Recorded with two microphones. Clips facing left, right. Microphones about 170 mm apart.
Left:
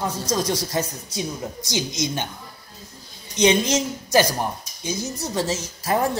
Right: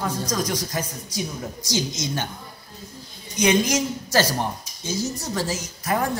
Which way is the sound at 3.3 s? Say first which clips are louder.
Left 1 dB; 25° left (ahead or behind).